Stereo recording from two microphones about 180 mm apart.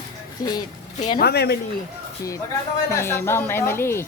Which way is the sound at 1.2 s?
60° left (ahead or behind).